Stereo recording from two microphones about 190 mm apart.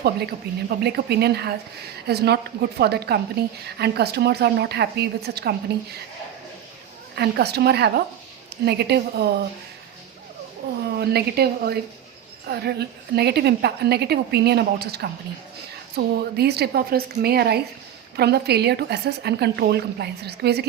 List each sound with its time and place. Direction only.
0.0 s a woman's voice: 55° right (ahead or behind)
7.2 s a woman's voice: 60° right (ahead or behind)
10.9 s a woman's voice: 55° right (ahead or behind)